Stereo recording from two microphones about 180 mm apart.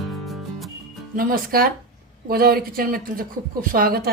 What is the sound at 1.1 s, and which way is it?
A woman's voice, 50° right (ahead or behind).